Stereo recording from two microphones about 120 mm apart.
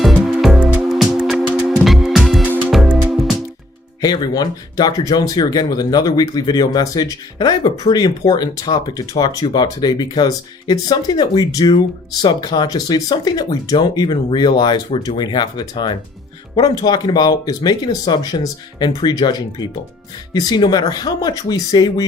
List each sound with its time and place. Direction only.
0.0 s music: centre (ahead or behind)
0.6 s music: 10° right (ahead or behind)
4.0 s speech: 35° left (ahead or behind)